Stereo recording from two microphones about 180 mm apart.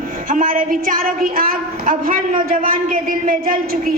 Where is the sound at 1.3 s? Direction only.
50° right (ahead or behind).